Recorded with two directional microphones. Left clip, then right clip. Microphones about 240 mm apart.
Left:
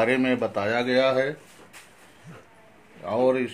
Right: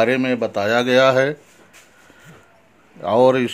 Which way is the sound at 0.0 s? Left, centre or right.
Right.